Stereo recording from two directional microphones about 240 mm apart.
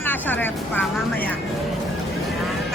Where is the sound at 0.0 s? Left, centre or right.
Centre.